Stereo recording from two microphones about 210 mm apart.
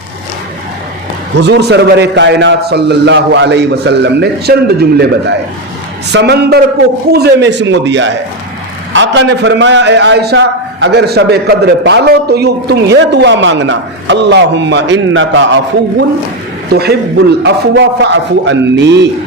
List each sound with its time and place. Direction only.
1.4 s a man's voice: 55° right (ahead or behind)
6.1 s a man's voice: 55° right (ahead or behind)